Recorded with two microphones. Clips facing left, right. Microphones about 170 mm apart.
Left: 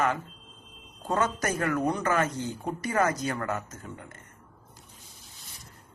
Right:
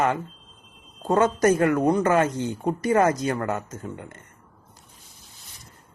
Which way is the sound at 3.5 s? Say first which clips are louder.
Right 5 dB; 30° right (ahead or behind).